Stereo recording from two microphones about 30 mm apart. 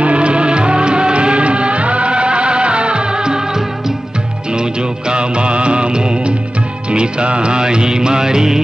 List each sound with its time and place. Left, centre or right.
0.0 s music: right; by 8.6 s centre